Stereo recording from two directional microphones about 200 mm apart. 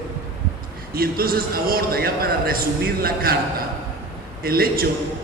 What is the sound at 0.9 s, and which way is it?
A man's voice, 50° right (ahead or behind).